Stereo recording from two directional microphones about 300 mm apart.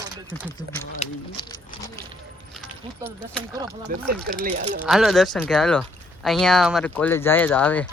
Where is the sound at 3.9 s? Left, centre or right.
Right.